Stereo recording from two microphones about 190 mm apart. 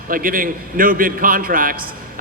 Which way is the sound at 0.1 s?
45° right (ahead or behind).